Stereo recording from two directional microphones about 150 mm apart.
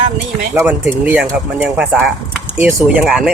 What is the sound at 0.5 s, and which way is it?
Speech, 15° right (ahead or behind).